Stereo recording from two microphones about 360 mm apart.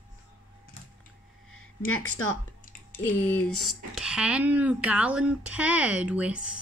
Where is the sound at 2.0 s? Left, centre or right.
Left.